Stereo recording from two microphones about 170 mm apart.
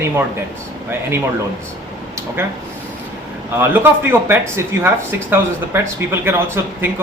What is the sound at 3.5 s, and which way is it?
Speech, 15° right (ahead or behind).